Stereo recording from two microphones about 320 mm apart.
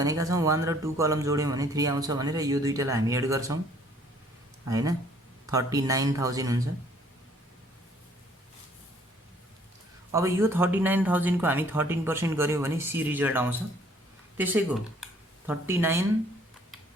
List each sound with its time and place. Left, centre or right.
0.0 s speech: centre
4.7 s speech: centre
10.1 s speech: centre
15.0 s a sound: centre